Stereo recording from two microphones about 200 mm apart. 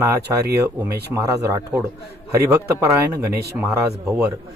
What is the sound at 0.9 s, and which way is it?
Speech, 55° right (ahead or behind).